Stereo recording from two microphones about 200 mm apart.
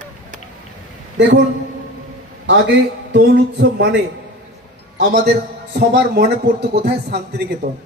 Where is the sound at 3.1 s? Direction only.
60° right (ahead or behind).